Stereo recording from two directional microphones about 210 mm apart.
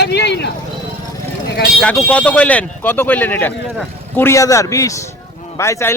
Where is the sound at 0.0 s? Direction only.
55° left (ahead or behind).